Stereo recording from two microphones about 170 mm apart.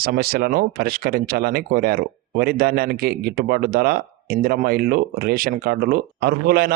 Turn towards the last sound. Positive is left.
turn(degrees=-65)  # may be behind; listen again after turning